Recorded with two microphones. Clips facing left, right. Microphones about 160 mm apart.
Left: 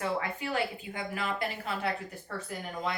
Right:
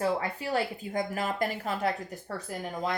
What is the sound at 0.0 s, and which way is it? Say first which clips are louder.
A woman's voice: right 3 dB; 35° right (ahead or behind).